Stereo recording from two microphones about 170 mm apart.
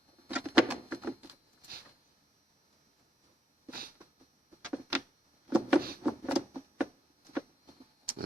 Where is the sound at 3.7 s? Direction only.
60° right (ahead or behind).